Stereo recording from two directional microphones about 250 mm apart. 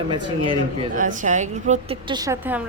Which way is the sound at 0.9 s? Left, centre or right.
Right.